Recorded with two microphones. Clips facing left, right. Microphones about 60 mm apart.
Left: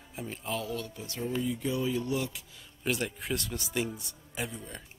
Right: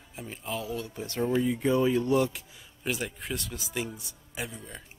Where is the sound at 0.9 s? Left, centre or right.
Right.